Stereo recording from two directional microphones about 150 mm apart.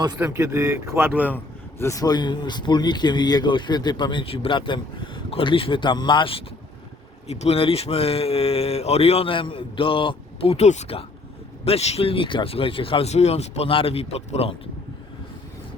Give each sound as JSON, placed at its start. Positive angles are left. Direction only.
{"t": 0.2, "sound": "speech", "side_deg": -15}
{"t": 1.8, "sound": "speech", "side_deg": 20}